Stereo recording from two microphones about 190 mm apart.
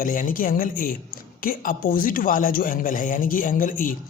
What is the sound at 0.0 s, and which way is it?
Speech, 45° left (ahead or behind).